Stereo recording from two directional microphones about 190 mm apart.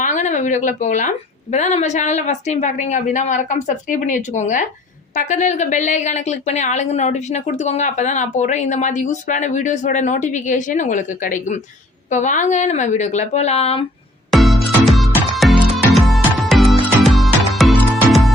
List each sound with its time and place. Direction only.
0.0 s a woman's voice: 40° left (ahead or behind)
14.3 s music: centre (ahead or behind)